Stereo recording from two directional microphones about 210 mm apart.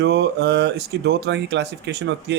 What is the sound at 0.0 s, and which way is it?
Speech, 55° right (ahead or behind).